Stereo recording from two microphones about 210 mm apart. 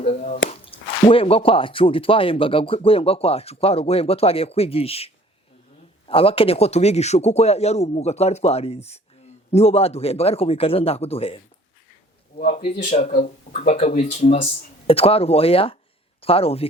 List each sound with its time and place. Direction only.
0.0 s drip: 30° left (ahead or behind)
0.6 s speech: 25° left (ahead or behind)
12.4 s speech: 35° left (ahead or behind)